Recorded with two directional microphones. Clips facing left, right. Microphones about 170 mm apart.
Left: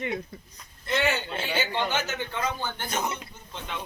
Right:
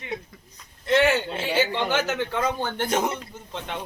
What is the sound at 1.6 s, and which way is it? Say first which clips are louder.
Speech: right 5 dB; 90° right.